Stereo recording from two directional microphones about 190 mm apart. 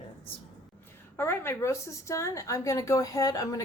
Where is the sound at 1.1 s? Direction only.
10° left (ahead or behind).